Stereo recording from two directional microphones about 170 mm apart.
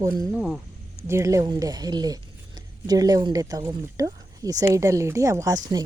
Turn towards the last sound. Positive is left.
turn(degrees=-20)  # may be behind; listen again after turning